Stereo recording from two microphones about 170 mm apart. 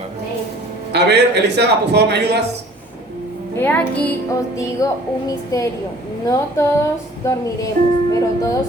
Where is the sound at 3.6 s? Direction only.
10° left (ahead or behind).